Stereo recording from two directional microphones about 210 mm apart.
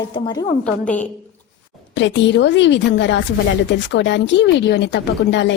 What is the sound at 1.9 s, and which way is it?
Speech, 60° left (ahead or behind).